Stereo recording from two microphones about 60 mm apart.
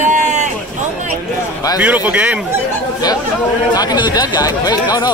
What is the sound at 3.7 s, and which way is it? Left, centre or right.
Speech, left.